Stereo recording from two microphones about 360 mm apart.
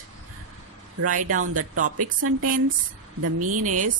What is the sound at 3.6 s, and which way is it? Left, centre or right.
Speech, right.